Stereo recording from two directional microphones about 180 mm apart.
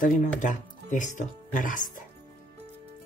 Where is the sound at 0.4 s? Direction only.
45° left (ahead or behind).